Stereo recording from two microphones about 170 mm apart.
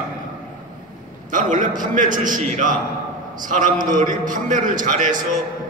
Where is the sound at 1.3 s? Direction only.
50° right (ahead or behind).